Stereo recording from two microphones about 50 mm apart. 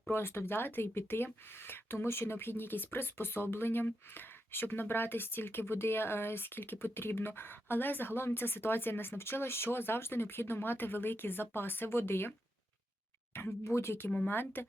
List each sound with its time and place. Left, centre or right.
0.1 s speech: left
13.3 s speech: left
14.3 s speech: left